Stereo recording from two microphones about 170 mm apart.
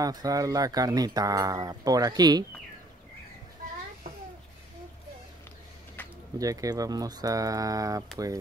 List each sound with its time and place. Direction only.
0.0 s speech: 20° right (ahead or behind)
6.0 s a sound: 10° left (ahead or behind)
6.3 s speech: 20° right (ahead or behind)